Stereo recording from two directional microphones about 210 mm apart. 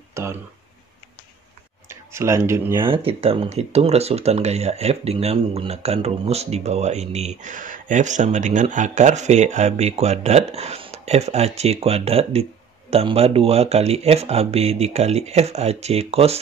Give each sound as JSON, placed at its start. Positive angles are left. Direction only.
{"t": 0.1, "sound": "a sound", "side_deg": -15}
{"t": 1.9, "sound": "speech", "side_deg": -15}
{"t": 2.8, "sound": "speech", "side_deg": -25}